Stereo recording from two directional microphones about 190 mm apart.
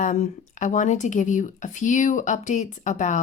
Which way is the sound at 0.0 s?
40° left (ahead or behind).